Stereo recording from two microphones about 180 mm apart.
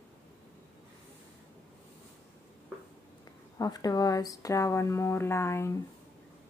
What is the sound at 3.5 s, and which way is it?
Speech, 20° left (ahead or behind).